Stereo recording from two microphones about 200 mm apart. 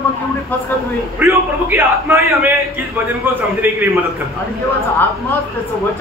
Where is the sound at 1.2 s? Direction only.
10° right (ahead or behind).